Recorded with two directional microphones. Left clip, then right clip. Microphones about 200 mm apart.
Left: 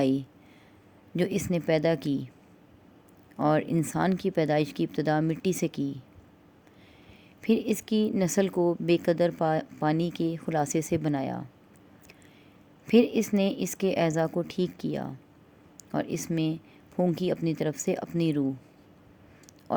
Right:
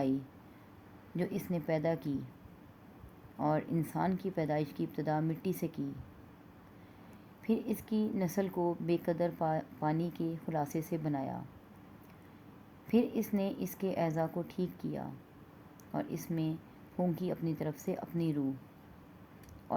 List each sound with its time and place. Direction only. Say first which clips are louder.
0.0 s speech: left 8 dB; 50° left (ahead or behind)
3.3 s speech: left 8 dB; 50° left (ahead or behind)
7.4 s speech: left 9 dB; 50° left (ahead or behind)
12.9 s speech: left 9 dB; 50° left (ahead or behind)